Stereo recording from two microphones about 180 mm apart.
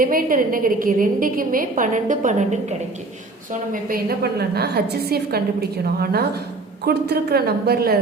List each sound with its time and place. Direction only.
0.0 s a woman's voice: 50° right (ahead or behind)